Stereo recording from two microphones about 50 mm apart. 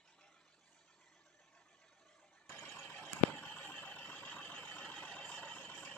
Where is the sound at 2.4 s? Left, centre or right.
Left.